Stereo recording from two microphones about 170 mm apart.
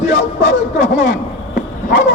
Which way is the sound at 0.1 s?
90° left.